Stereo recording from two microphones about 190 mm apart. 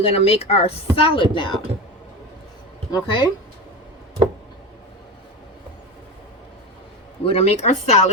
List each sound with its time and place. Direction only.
0.0 s speech: 30° left (ahead or behind)
2.9 s speech: 25° left (ahead or behind)
7.3 s speech: 35° left (ahead or behind)